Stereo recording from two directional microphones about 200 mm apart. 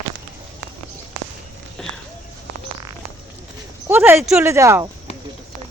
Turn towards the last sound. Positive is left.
turn(degrees=-15)  # may be behind; listen again after turning